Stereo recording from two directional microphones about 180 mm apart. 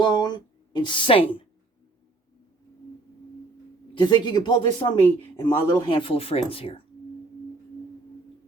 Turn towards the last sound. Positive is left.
turn(degrees=30)  # may be behind; listen again after turning